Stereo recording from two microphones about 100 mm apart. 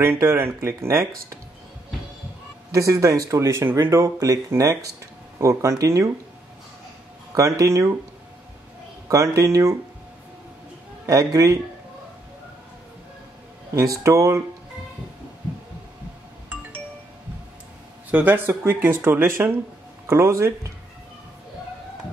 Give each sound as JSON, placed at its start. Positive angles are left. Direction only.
{"t": 0.0, "sound": "speech", "side_deg": -25}
{"t": 2.7, "sound": "speech", "side_deg": -30}
{"t": 7.3, "sound": "speech", "side_deg": -35}
{"t": 9.1, "sound": "speech", "side_deg": -35}
{"t": 11.1, "sound": "speech", "side_deg": -35}
{"t": 13.7, "sound": "speech", "side_deg": -35}
{"t": 18.1, "sound": "speech", "side_deg": -20}